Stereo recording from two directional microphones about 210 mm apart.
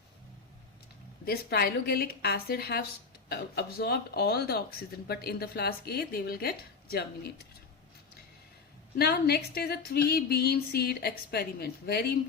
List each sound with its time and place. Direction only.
1.2 s speech: 50° left (ahead or behind)
9.0 s speech: 50° left (ahead or behind)